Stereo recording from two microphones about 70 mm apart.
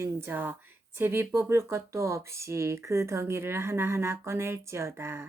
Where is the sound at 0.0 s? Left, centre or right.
Right.